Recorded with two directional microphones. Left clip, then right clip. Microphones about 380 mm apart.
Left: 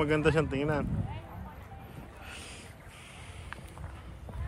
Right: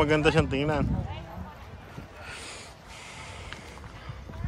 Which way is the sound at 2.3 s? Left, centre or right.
Centre.